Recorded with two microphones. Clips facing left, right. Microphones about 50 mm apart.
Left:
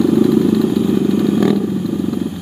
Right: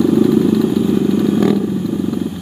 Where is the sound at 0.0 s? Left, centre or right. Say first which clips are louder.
Even; centre.